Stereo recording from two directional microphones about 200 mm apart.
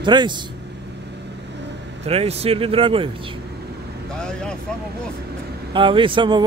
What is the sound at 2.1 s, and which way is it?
Speech, 30° right (ahead or behind).